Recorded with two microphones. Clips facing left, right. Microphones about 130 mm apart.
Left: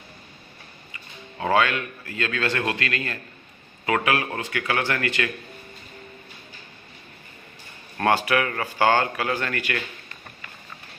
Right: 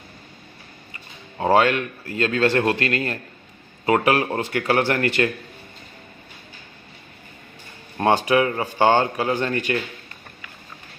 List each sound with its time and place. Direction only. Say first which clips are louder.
1.4 s a man's voice: right 4 dB; 35° right (ahead or behind)
7.9 s speech: right 3 dB; 20° right (ahead or behind)